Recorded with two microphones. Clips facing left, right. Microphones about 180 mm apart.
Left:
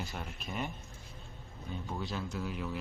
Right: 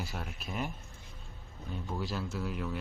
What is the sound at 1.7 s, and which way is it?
Speech, centre (ahead or behind).